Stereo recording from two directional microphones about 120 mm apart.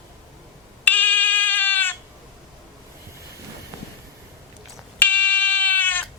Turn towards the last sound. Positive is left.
turn(degrees=15)  # may be behind; listen again after turning